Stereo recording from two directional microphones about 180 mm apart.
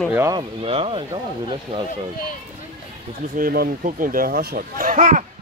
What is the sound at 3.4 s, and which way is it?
Speech, 55° right (ahead or behind).